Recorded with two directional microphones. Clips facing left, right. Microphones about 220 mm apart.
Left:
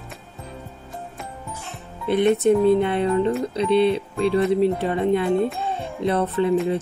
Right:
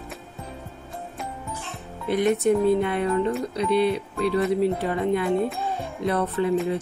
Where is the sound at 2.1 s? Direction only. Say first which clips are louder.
Left 3 dB; 25° left (ahead or behind).